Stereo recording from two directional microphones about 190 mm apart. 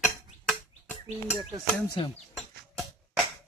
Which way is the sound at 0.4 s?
5° left (ahead or behind).